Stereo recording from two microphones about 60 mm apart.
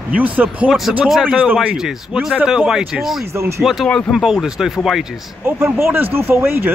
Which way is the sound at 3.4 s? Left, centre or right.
Right.